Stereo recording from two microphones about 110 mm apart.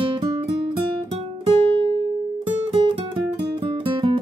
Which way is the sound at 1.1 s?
60° right (ahead or behind).